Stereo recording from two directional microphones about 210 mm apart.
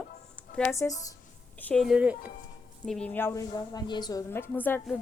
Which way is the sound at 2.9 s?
5° left (ahead or behind).